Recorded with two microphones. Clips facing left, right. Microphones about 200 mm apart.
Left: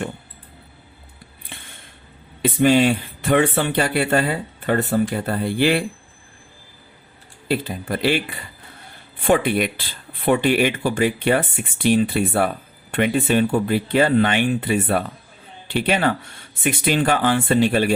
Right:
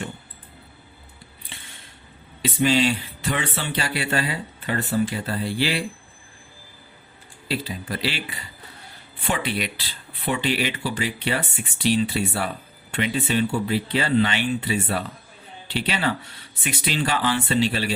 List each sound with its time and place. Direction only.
1.5 s a sound: 50° left (ahead or behind)
2.4 s speech: 55° left (ahead or behind)
7.4 s speech: 55° left (ahead or behind)